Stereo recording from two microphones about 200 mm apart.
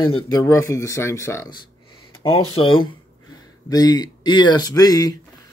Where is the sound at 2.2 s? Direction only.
20° left (ahead or behind).